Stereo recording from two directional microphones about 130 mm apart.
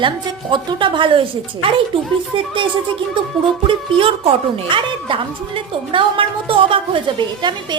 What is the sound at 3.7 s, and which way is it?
A woman's voice, 45° right (ahead or behind).